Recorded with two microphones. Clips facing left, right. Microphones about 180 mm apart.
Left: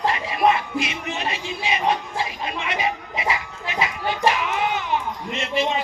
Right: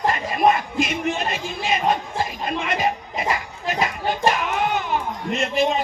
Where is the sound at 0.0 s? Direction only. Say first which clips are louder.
Right 1 dB; 45° right (ahead or behind).